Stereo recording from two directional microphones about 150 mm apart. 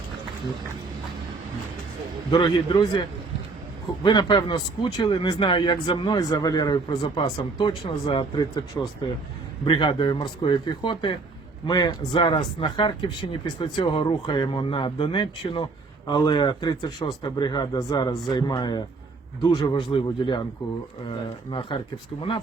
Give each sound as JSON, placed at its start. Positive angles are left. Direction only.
{"t": 2.3, "sound": "speech", "side_deg": 30}
{"t": 4.0, "sound": "speech", "side_deg": 30}
{"t": 8.8, "sound": "speech", "side_deg": 15}
{"t": 9.6, "sound": "speech", "side_deg": 30}
{"t": 19.7, "sound": "speech", "side_deg": 35}